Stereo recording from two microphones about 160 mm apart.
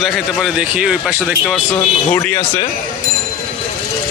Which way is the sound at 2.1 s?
15° left (ahead or behind).